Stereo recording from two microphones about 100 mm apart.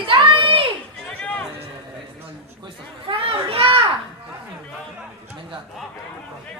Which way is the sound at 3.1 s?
70° right (ahead or behind).